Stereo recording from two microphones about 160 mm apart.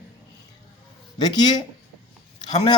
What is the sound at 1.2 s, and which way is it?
Speech, 25° left (ahead or behind).